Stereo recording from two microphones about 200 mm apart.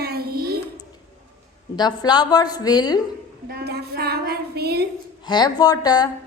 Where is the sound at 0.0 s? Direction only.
50° right (ahead or behind).